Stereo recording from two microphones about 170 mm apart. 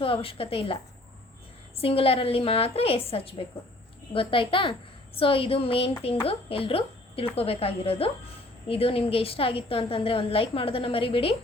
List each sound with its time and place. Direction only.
0.0 s a woman's voice: 35° left (ahead or behind)
1.8 s a woman's voice: 35° left (ahead or behind)